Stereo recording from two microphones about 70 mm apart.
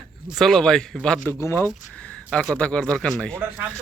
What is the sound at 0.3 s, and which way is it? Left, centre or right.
Speech, centre.